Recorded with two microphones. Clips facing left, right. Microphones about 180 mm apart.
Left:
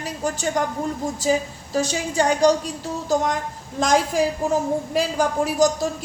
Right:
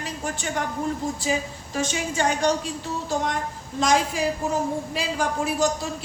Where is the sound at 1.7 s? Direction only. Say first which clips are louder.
Left 4 dB; 35° left (ahead or behind).